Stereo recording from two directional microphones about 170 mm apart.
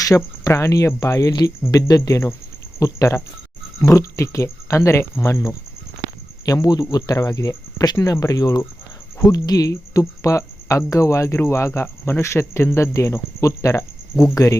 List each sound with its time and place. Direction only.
0.0 s speech: 20° left (ahead or behind)